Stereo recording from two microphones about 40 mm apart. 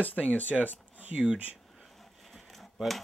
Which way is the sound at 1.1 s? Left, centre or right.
Right.